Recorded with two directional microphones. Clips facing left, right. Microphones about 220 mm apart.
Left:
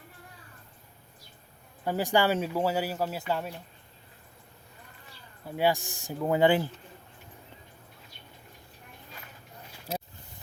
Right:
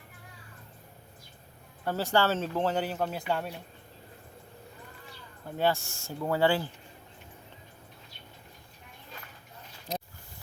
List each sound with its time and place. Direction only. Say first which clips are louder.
1.8 s speech: left 1 dB; 15° left (ahead or behind)
5.5 s speech: left 1 dB; 10° left (ahead or behind)